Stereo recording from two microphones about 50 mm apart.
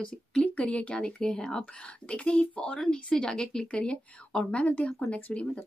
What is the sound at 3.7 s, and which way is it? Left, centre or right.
Speech, left.